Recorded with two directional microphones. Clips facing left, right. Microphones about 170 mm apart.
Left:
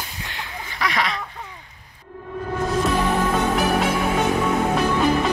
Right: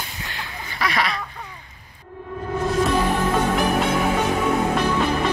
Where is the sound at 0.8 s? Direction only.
20° left (ahead or behind).